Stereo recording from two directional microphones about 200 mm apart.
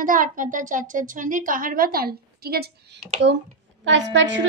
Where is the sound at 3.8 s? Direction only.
65° right (ahead or behind).